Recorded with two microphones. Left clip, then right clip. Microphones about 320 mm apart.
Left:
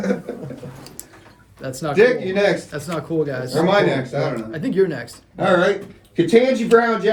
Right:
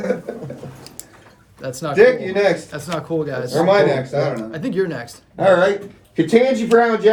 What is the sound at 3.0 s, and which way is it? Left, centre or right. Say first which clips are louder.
Speech: left 1 dB; centre.